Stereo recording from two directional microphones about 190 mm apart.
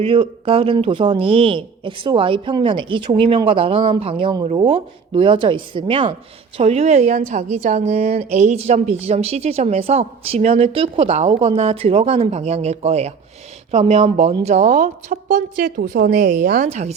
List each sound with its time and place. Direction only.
0.0 s a woman's voice: 25° right (ahead or behind); by 16.6 s 50° right (ahead or behind)
16.6 s a woman's voice: 35° right (ahead or behind)